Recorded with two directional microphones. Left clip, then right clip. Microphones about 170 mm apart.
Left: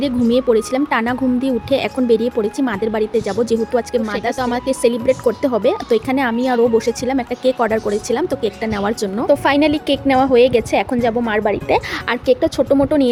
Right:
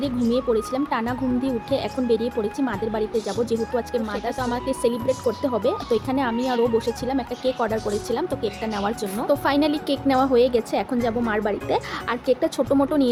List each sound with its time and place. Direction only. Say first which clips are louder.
0.3 s speech: left 7 dB; 40° left (ahead or behind)
4.4 s speech: left 6 dB; 40° left (ahead or behind)
9.2 s a woman's voice: left 7 dB; 30° left (ahead or behind)
12.3 s a woman's voice: left 6 dB; 25° left (ahead or behind)